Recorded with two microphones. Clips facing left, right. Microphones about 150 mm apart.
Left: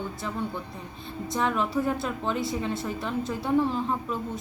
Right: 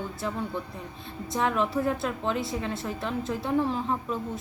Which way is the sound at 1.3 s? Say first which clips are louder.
Even; centre (ahead or behind).